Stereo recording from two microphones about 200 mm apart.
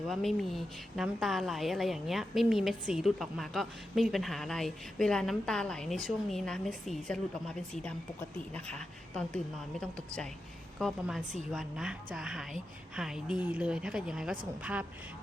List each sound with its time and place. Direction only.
0.1 s a woman's voice: centre (ahead or behind)
10.8 s a woman's voice: centre (ahead or behind)